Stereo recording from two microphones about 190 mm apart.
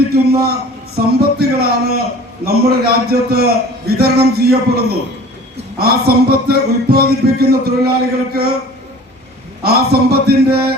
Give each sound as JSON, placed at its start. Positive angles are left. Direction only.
{"t": 0.1, "sound": "a man's voice", "side_deg": -55}
{"t": 9.6, "sound": "speech", "side_deg": -55}